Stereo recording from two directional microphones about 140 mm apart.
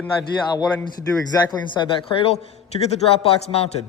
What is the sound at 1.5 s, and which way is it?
A man's voice, 35° left (ahead or behind).